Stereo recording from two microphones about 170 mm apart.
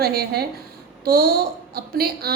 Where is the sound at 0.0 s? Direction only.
65° right (ahead or behind).